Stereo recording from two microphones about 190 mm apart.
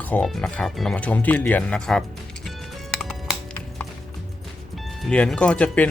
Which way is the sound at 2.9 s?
Centre (ahead or behind).